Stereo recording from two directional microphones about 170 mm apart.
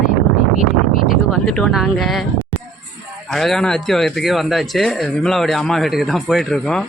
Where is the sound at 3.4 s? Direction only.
5° left (ahead or behind).